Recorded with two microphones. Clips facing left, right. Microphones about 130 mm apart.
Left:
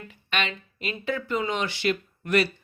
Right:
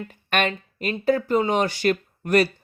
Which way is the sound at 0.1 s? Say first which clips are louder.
Right 6 dB; 50° right (ahead or behind).